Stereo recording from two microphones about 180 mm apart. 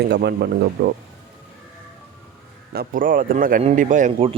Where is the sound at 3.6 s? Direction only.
40° right (ahead or behind).